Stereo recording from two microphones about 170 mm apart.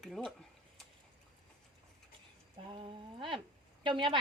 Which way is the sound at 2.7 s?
30° right (ahead or behind).